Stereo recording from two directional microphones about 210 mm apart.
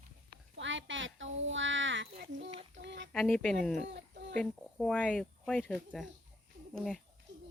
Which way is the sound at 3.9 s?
55° right (ahead or behind).